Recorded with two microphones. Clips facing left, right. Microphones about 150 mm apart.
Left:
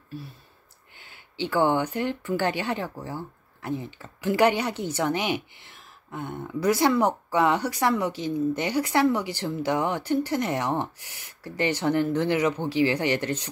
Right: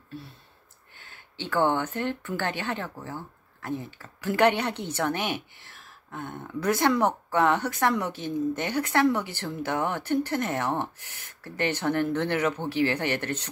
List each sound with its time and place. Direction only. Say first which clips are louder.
0.9 s speech: left 4 dB; 10° left (ahead or behind)
9.2 s a woman's voice: left 4 dB; 55° right (ahead or behind)
9.7 s speech: left 2 dB; 10° left (ahead or behind)